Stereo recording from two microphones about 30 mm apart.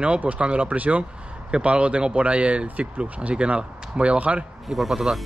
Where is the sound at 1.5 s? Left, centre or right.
Right.